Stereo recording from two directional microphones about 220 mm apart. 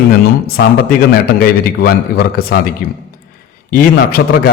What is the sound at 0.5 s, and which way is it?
A man's voice, 45° left (ahead or behind).